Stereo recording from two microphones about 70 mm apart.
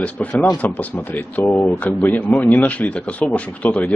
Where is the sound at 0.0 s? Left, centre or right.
Centre.